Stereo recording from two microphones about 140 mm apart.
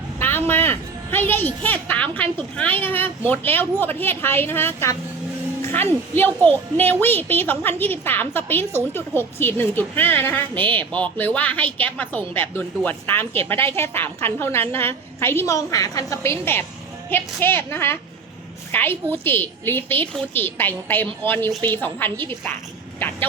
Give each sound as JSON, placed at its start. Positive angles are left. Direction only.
{"t": 0.2, "sound": "a woman's voice", "side_deg": 15}